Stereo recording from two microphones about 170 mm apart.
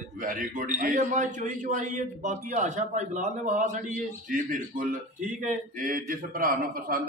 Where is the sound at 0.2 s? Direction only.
55° right (ahead or behind).